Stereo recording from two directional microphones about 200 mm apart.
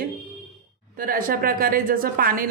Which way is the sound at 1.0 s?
45° right (ahead or behind).